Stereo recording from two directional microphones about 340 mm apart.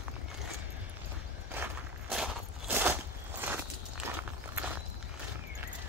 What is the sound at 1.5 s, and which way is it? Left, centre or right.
Walk, centre.